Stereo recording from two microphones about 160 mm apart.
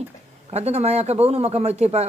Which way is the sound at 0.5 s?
40° right (ahead or behind).